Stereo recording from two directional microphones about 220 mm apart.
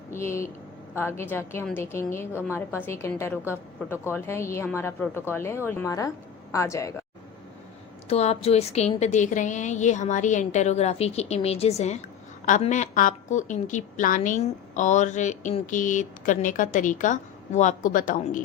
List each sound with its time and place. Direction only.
0.1 s a woman's voice: 10° left (ahead or behind)
8.1 s a woman's voice: 30° left (ahead or behind)